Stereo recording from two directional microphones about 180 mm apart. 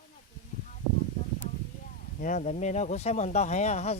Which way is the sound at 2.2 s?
45° left (ahead or behind).